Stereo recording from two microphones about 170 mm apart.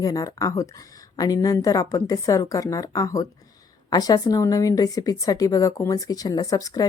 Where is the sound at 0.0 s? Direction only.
20° left (ahead or behind).